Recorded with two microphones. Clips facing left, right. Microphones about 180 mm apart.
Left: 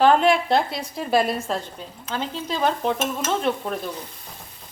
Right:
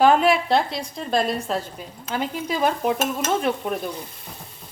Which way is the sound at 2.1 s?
10° right (ahead or behind).